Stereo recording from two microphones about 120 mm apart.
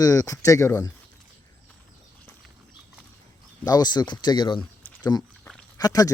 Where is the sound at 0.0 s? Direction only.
30° left (ahead or behind).